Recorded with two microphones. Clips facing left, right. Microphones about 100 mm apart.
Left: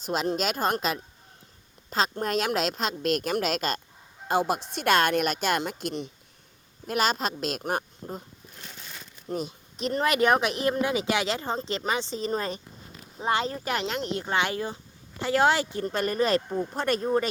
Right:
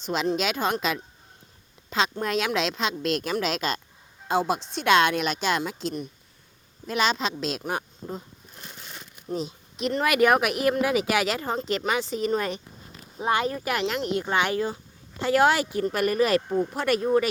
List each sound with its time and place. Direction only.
0.0 s a woman's voice: 45° left (ahead or behind)
9.7 s speech: 35° left (ahead or behind)
14.4 s speech: 20° left (ahead or behind)